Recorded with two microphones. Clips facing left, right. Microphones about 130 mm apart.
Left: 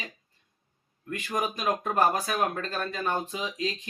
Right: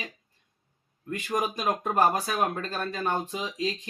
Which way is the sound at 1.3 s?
Centre (ahead or behind).